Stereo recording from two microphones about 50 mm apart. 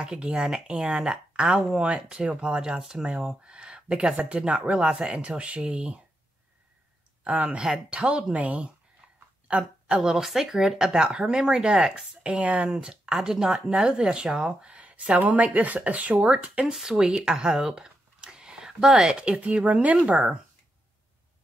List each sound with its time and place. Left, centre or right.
0.0 s speech: centre
7.2 s a woman's voice: right
10.1 s speech: centre
10.9 s speech: centre
12.7 s speech: centre